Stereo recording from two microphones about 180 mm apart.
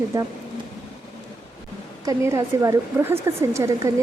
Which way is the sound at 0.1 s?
15° right (ahead or behind).